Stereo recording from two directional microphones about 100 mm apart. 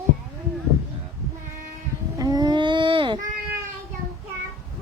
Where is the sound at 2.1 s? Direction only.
40° right (ahead or behind); by 3.1 s 60° right (ahead or behind).